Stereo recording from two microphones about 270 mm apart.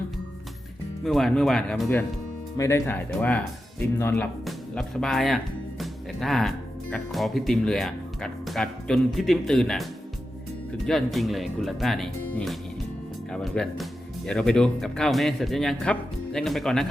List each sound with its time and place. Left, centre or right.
1.0 s speech: centre
5.8 s music: centre
6.9 s speech: centre
10.8 s speech: centre